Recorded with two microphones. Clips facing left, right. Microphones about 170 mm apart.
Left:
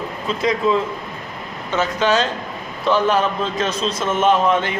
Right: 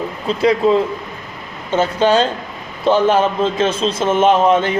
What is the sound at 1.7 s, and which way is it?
A man's voice, 30° right (ahead or behind).